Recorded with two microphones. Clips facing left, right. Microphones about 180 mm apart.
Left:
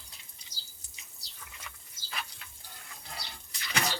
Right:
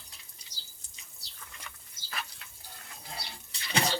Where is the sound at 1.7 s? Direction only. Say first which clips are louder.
Even; centre (ahead or behind).